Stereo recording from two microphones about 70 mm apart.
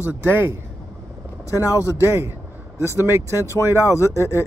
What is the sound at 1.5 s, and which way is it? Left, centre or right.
Speech, left.